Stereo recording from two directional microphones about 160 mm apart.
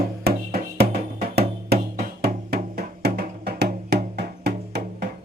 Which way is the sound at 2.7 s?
85° right.